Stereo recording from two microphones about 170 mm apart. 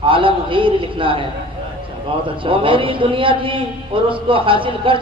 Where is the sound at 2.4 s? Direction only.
30° right (ahead or behind).